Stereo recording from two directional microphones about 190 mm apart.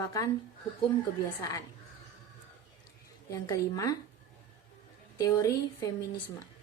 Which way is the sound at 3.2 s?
15° left (ahead or behind).